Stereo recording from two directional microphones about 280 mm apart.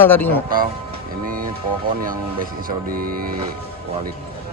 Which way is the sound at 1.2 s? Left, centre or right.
Right.